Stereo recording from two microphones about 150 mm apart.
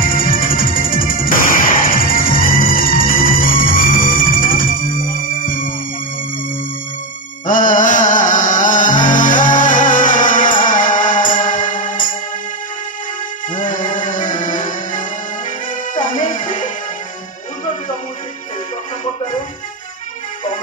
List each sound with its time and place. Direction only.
0.3 s music: 70° left (ahead or behind)
7.4 s music: 60° left (ahead or behind)
13.6 s music: 60° left (ahead or behind)